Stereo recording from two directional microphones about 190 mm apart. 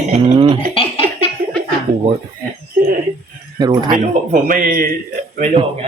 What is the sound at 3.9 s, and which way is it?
Speech, 45° right (ahead or behind).